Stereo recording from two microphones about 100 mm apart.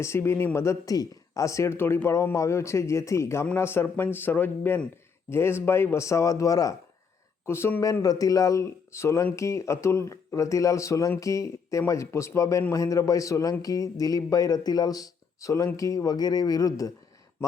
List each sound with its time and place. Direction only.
0.0 s speech: 25° left (ahead or behind)
7.4 s a man's voice: 25° left (ahead or behind)